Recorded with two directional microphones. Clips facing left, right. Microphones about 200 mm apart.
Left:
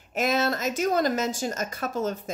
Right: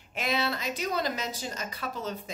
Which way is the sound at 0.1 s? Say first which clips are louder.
Left 5 dB; 45° left (ahead or behind).